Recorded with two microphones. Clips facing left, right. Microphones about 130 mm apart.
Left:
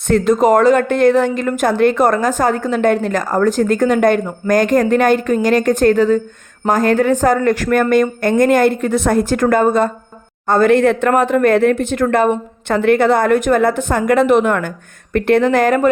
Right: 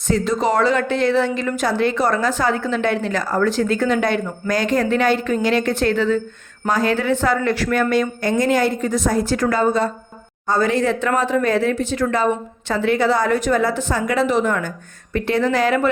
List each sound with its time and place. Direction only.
0.1 s a woman's voice: 50° left (ahead or behind)